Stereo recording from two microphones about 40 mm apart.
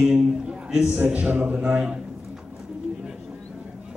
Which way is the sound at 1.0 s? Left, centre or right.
Right.